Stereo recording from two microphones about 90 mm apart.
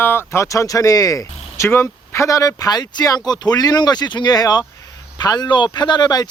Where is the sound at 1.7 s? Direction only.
25° left (ahead or behind); by 6.3 s 50° left (ahead or behind).